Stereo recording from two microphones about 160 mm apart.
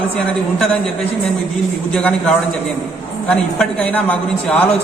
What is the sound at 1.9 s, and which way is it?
A man's voice, 5° left (ahead or behind).